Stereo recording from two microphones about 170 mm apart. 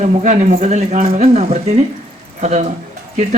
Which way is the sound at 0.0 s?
40° right (ahead or behind).